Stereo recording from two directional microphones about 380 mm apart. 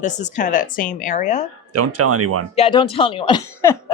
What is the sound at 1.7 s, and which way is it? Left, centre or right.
Speech, right.